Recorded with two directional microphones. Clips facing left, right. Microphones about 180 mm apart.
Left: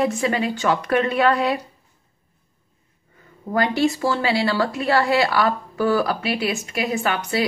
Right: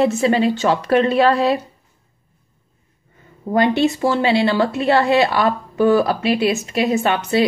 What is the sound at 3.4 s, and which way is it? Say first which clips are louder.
A woman's voice: right 4 dB; 20° right (ahead or behind).